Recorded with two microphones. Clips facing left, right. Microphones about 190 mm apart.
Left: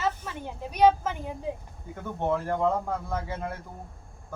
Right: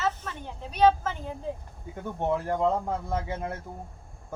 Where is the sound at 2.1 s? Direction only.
15° right (ahead or behind).